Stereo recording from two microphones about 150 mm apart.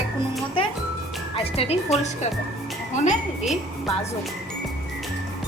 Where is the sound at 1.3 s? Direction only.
40° left (ahead or behind).